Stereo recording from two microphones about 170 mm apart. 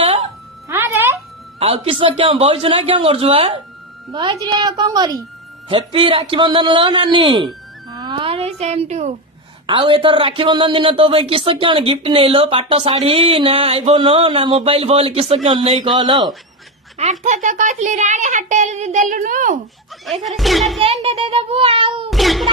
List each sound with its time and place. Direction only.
0.0 s music: 35° right (ahead or behind)
0.7 s music: 15° right (ahead or behind)
1.5 s a woman's voice: 35° right (ahead or behind)
9.6 s a woman's voice: 30° right (ahead or behind)
17.0 s a child's voice: 45° right (ahead or behind)
20.1 s speech: centre (ahead or behind)
20.8 s speech: 35° right (ahead or behind)
22.1 s a sound: centre (ahead or behind)